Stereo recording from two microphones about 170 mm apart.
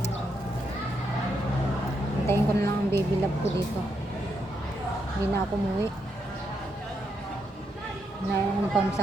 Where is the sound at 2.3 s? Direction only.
15° left (ahead or behind).